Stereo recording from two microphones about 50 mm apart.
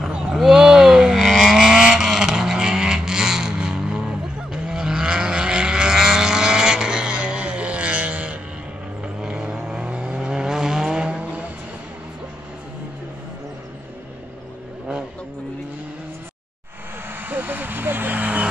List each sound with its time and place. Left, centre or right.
0.3 s vehicle: centre
11.1 s vehicle: right
17.1 s vehicle: right